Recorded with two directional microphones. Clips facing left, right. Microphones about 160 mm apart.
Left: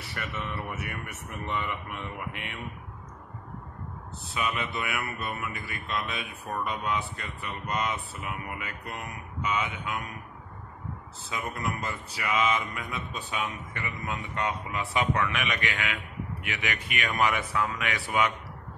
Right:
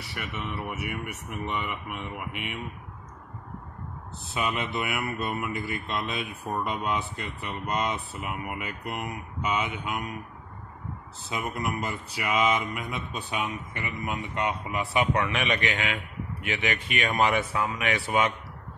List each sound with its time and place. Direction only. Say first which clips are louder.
0.1 s mantra: even; 15° right (ahead or behind)
4.3 s mantra: right 2 dB; 25° right (ahead or behind)
11.2 s mantra: right 2 dB; 25° right (ahead or behind)
15.1 s mantra: right 3 dB; 25° right (ahead or behind)